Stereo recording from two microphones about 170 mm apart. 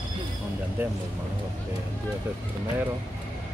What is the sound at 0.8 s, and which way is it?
Speech, 10° right (ahead or behind).